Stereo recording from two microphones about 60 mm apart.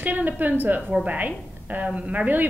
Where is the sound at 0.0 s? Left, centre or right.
Right.